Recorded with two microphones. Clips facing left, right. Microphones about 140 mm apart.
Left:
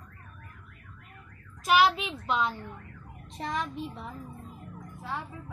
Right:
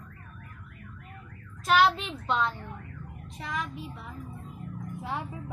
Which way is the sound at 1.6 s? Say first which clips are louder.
Even; 10° left (ahead or behind).